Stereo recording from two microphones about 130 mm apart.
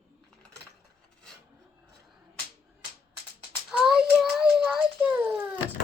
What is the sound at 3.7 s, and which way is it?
Child singing, 5° right (ahead or behind).